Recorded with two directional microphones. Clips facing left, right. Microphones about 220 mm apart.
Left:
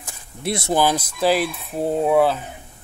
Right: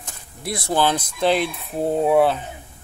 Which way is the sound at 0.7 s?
10° left (ahead or behind).